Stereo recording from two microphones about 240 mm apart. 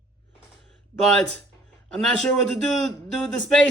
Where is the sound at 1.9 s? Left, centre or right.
Centre.